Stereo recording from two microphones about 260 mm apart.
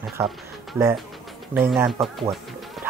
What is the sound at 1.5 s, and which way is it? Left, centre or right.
Speech, centre.